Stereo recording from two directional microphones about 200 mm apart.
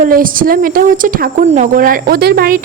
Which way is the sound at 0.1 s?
45° right (ahead or behind).